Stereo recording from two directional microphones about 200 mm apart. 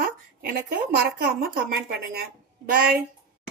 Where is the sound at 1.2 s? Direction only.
50° right (ahead or behind).